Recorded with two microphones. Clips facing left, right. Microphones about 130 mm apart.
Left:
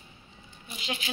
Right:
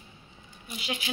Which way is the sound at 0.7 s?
5° right (ahead or behind).